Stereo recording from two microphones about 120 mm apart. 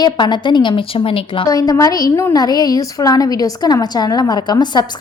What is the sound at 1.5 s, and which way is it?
A woman's voice, 30° left (ahead or behind).